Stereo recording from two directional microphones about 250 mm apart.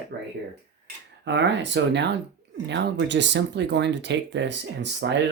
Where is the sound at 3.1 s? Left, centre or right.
Right.